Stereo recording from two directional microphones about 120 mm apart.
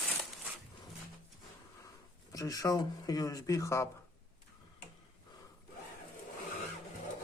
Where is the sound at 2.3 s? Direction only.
30° left (ahead or behind).